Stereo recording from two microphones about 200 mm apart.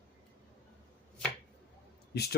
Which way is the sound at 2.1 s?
55° left (ahead or behind).